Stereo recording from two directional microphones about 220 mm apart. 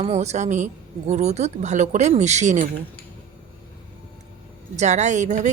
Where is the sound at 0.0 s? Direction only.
30° right (ahead or behind).